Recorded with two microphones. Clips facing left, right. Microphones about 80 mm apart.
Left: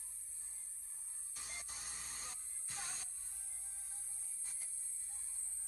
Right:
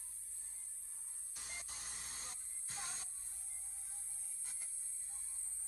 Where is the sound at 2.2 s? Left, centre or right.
Right.